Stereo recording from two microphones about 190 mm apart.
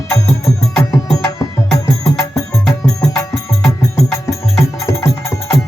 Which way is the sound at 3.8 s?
15° left (ahead or behind).